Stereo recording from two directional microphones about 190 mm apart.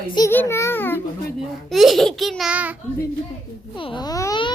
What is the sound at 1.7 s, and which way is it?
Speech, centre (ahead or behind).